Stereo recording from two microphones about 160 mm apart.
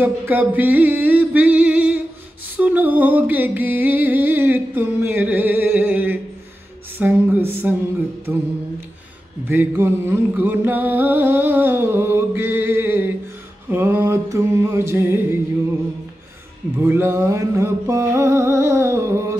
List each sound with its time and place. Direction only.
0.0 s music: 10° right (ahead or behind)
9.5 s music: 15° right (ahead or behind)
16.7 s music: 15° right (ahead or behind)